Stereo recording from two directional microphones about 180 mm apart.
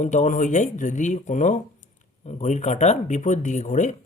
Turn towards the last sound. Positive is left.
turn(degrees=40)  # may be behind; listen again after turning